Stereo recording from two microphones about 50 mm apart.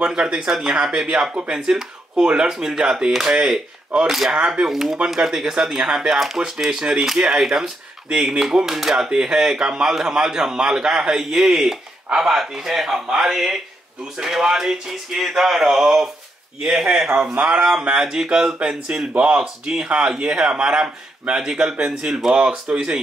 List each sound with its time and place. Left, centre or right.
0.0 s speech: centre
4.6 s speech: centre
17.2 s speech: right
17.5 s speech: centre